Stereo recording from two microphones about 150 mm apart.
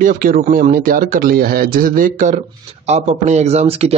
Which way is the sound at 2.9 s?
50° right (ahead or behind).